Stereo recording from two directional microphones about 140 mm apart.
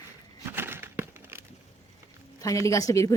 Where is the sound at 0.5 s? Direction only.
15° right (ahead or behind).